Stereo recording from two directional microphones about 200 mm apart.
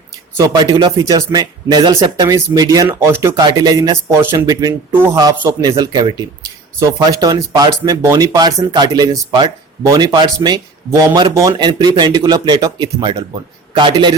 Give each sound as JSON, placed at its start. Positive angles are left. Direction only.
{"t": 0.3, "sound": "speech", "side_deg": -20}